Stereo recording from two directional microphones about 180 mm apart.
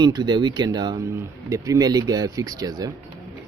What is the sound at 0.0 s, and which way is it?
Speech, 25° right (ahead or behind).